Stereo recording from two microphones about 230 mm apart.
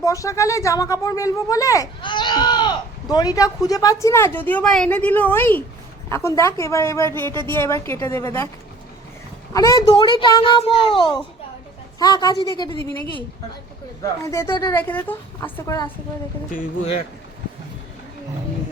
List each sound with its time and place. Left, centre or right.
0.0 s speech: centre
9.5 s a child's voice: centre
12.7 s a woman's voice: right
14.0 s speech: centre
14.8 s speech: centre
16.5 s speech: left